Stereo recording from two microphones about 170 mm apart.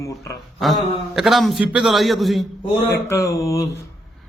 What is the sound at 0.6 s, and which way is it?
A man's voice, centre (ahead or behind).